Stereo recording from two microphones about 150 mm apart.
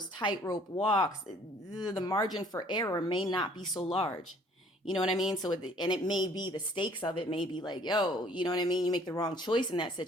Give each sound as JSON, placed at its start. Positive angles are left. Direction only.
{"t": 0.2, "sound": "speech", "side_deg": 30}
{"t": 5.3, "sound": "speech", "side_deg": 30}